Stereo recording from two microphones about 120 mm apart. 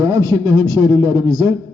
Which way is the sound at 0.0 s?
30° right (ahead or behind).